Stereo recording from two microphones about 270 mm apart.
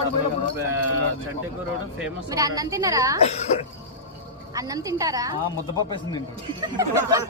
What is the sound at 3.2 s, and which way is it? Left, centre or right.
Speech, left.